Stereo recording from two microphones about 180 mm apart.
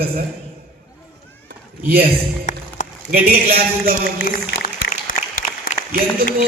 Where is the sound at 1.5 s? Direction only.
55° right (ahead or behind).